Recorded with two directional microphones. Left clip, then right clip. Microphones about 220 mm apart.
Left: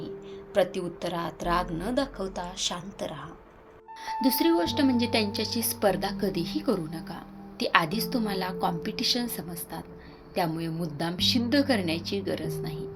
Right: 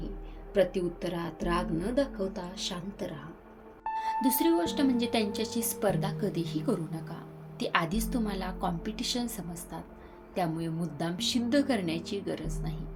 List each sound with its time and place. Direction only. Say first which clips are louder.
0.5 s a woman's voice: left 1 dB; 15° left (ahead or behind)
10.3 s a woman's voice: left 3 dB; 10° left (ahead or behind)